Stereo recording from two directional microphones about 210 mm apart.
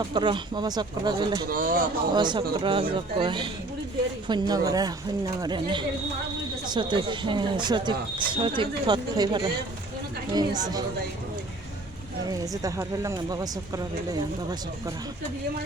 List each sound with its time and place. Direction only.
0.1 s speech: 20° right (ahead or behind)
1.5 s speech: 40° right (ahead or behind)
2.1 s speech: 20° right (ahead or behind)
12.4 s speech: 15° right (ahead or behind)